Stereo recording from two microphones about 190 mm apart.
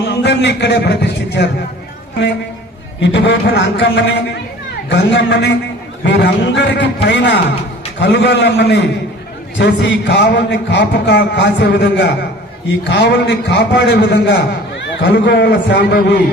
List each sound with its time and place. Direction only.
0.0 s a man's voice: 65° left (ahead or behind)
3.0 s a man's voice: 65° left (ahead or behind)